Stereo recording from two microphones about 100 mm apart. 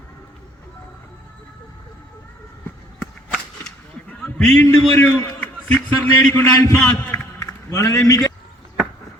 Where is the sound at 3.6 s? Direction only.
5° left (ahead or behind).